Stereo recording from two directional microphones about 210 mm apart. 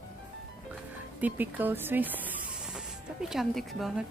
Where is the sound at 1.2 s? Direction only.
10° right (ahead or behind).